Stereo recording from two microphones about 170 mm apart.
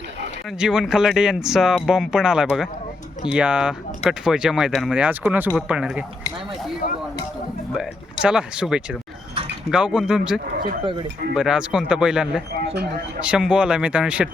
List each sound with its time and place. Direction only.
0.6 s speech: 5° right (ahead or behind)
8.2 s speech: 5° right (ahead or behind)
10.5 s speech: 60° right (ahead or behind)
11.3 s speech: 5° right (ahead or behind)
12.5 s speech: 70° right (ahead or behind)
13.2 s speech: 5° right (ahead or behind)